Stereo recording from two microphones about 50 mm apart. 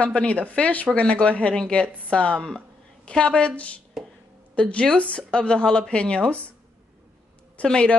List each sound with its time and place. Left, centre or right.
0.0 s a woman's voice: left
7.6 s a woman's voice: centre